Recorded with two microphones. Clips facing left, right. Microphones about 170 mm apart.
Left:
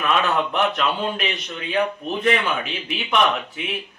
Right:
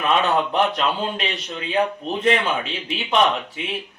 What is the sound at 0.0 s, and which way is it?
A man's voice, 30° right (ahead or behind).